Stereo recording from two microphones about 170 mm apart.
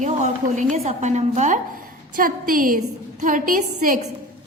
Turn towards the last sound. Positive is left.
turn(degrees=-50)  # may be behind; listen again after turning